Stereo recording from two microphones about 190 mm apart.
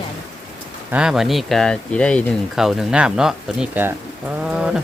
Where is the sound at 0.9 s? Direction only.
5° right (ahead or behind).